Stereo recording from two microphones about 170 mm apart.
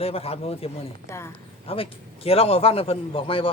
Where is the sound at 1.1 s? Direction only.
15° left (ahead or behind).